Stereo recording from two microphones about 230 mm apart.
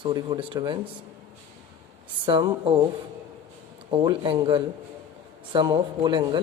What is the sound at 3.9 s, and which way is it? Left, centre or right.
A man's voice, centre.